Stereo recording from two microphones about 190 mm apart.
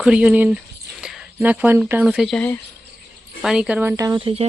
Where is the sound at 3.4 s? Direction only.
5° right (ahead or behind); by 4.4 s 30° right (ahead or behind).